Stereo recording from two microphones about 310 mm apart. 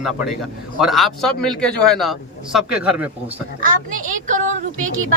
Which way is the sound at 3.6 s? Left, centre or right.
Right.